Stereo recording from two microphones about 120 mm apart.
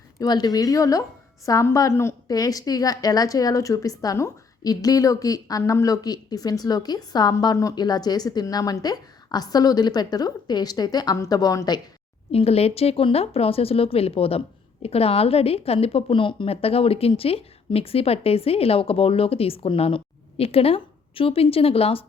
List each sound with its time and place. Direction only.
0.2 s a woman's voice: 35° left (ahead or behind)
12.3 s speech: 55° left (ahead or behind)